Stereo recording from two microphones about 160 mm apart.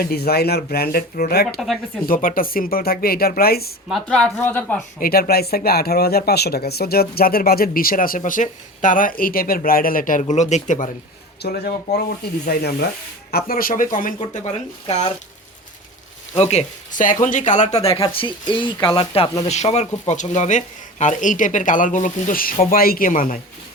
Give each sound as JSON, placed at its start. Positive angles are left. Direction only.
{"t": 0.0, "sound": "speech", "side_deg": 75}
{"t": 2.0, "sound": "speech", "side_deg": 60}
{"t": 3.8, "sound": "a woman's voice", "side_deg": 0}
{"t": 4.9, "sound": "speech", "side_deg": 65}
{"t": 11.4, "sound": "speech", "side_deg": 75}
{"t": 14.2, "sound": "speech", "side_deg": 40}
{"t": 16.4, "sound": "speech", "side_deg": 45}
{"t": 19.5, "sound": "speech", "side_deg": 45}